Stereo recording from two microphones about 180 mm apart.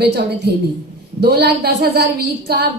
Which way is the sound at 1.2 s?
60° right (ahead or behind).